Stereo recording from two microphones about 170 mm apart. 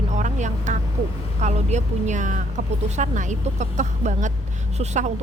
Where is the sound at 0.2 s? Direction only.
45° right (ahead or behind).